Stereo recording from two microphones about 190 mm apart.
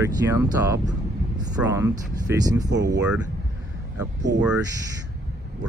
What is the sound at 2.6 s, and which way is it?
Speech, 65° right (ahead or behind).